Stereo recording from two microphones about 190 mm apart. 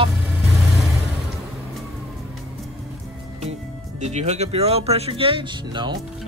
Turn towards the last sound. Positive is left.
turn(degrees=-25)  # may be behind; listen again after turning